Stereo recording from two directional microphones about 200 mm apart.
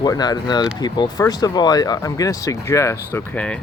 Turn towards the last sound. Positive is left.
turn(degrees=5)  # may be behind; listen again after turning